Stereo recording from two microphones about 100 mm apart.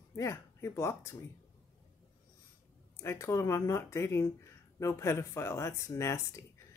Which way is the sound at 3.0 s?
30° left (ahead or behind).